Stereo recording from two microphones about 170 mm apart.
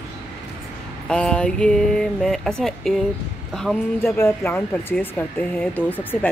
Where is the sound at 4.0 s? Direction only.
15° left (ahead or behind).